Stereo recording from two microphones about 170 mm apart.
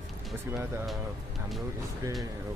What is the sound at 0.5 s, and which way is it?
Speech, centre (ahead or behind).